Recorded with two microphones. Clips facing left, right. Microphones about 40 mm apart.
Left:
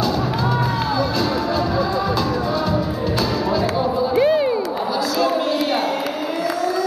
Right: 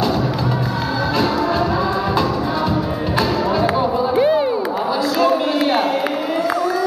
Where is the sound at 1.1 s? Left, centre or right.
Right.